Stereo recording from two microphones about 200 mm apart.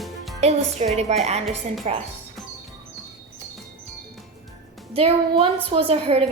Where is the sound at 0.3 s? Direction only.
35° right (ahead or behind).